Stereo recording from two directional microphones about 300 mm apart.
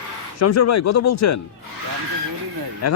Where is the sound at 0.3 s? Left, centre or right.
Left.